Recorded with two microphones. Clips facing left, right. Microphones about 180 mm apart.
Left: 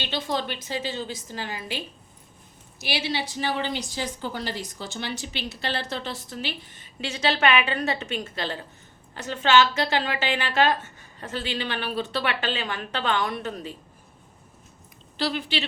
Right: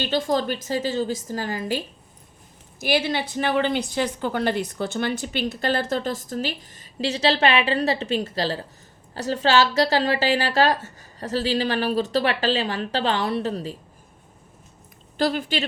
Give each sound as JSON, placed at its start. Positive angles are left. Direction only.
{"t": 0.0, "sound": "a woman's voice", "side_deg": -45}
{"t": 2.8, "sound": "a woman's voice", "side_deg": -50}
{"t": 15.2, "sound": "a woman's voice", "side_deg": -45}